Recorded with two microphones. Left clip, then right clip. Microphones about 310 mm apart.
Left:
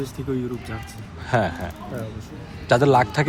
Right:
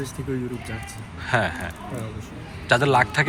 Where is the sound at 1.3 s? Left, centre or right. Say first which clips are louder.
Left 1 dB; centre.